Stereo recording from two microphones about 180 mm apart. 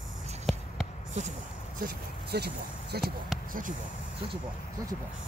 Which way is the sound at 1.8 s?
60° right (ahead or behind).